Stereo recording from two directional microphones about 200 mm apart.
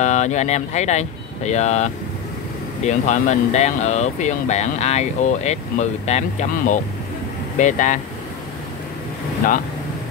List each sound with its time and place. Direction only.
0.0 s speech: 35° left (ahead or behind)
2.9 s speech: 35° left (ahead or behind)